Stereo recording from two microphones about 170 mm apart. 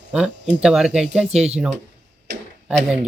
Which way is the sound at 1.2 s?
40° right (ahead or behind).